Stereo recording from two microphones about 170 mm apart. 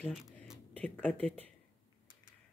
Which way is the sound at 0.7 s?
10° left (ahead or behind).